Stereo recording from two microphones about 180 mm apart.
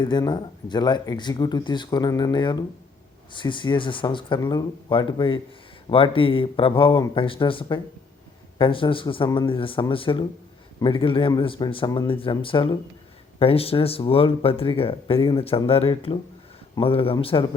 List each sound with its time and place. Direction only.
0.0 s speech: 25° left (ahead or behind)